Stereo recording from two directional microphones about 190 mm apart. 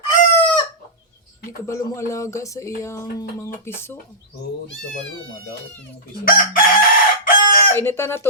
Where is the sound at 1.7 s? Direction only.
15° left (ahead or behind).